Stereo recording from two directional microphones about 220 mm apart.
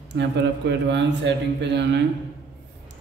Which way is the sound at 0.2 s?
50° right (ahead or behind).